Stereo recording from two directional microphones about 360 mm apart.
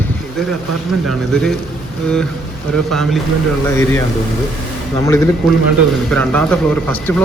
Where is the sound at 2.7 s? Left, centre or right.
Centre.